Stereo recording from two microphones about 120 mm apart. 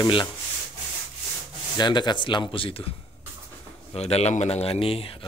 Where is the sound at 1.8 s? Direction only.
40° left (ahead or behind).